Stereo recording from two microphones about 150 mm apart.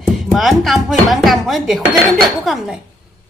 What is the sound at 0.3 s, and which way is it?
Speech, centre (ahead or behind).